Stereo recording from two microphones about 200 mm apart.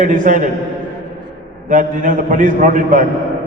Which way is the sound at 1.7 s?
40° right (ahead or behind).